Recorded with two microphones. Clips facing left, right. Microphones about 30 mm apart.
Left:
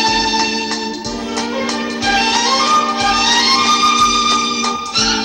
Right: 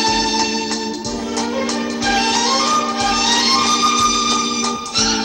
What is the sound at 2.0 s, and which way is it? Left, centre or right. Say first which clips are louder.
Music: left 3 dB; centre.